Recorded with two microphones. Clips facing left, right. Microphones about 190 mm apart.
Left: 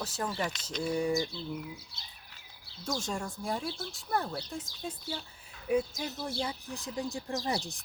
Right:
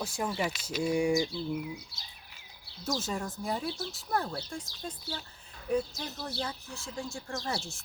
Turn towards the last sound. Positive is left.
turn(degrees=15)  # may be behind; listen again after turning